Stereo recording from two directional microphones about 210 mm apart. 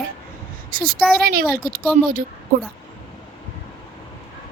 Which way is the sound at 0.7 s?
40° right (ahead or behind).